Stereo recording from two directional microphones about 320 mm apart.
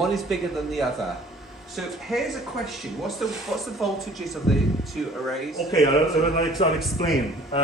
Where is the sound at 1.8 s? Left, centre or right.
Centre.